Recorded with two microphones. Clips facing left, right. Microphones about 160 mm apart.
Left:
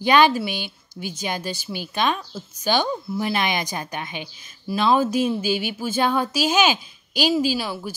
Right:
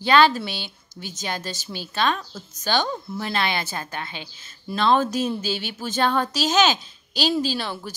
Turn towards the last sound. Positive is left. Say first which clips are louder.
# left 3 dB
turn(degrees=5)  # may be behind; listen again after turning